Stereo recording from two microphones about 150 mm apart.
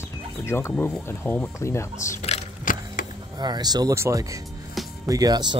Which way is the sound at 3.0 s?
65° left (ahead or behind).